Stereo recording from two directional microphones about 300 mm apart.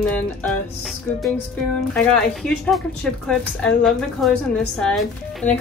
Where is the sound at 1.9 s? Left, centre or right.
Centre.